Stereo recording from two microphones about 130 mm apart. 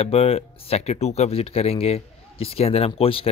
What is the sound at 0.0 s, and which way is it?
Speech, 50° left (ahead or behind).